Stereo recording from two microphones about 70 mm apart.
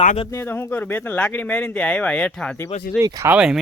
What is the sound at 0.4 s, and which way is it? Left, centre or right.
Speech, left.